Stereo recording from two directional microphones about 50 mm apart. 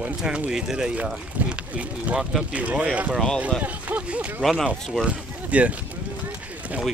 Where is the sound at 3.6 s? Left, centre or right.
Right.